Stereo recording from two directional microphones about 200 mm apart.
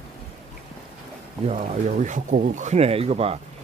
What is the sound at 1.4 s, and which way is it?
Speech, 35° right (ahead or behind).